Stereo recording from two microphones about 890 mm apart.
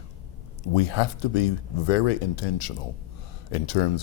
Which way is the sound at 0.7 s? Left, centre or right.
Left.